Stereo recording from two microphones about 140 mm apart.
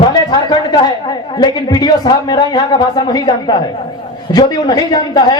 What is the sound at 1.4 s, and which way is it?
A man's voice, 30° left (ahead or behind).